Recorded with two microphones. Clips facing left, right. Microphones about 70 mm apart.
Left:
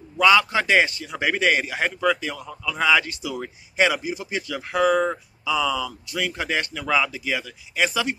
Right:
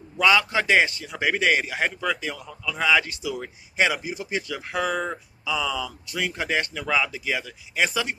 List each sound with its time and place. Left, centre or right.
0.2 s a man's voice: centre
3.9 s speech: right
4.3 s speech: centre